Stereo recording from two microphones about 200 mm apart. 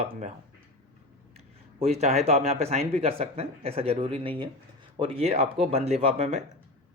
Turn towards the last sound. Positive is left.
turn(degrees=-30)  # may be behind; listen again after turning